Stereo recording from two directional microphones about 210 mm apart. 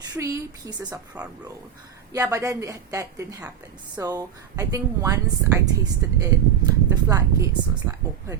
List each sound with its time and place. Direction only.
0.0 s speech: 15° right (ahead or behind)
1.1 s speech: 5° right (ahead or behind)